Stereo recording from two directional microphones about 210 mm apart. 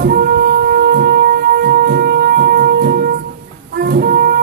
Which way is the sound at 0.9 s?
50° right (ahead or behind).